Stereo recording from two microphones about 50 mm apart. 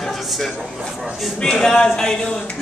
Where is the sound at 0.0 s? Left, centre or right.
Centre.